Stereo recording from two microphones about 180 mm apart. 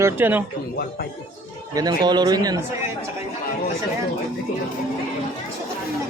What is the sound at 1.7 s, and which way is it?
Speech, 25° right (ahead or behind).